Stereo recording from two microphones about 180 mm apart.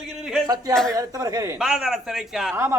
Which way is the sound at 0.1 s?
5° right (ahead or behind).